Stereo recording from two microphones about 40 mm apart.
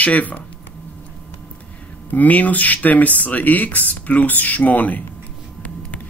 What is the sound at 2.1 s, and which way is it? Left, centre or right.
Speech, left.